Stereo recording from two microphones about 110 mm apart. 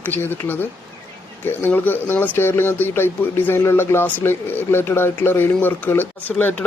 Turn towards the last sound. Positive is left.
turn(degrees=15)  # may be behind; listen again after turning